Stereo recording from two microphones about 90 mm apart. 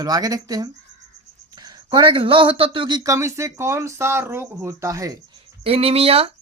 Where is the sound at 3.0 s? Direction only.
35° right (ahead or behind).